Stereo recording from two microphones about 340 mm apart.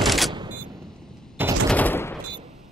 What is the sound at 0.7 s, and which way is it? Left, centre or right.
Gunshot, centre.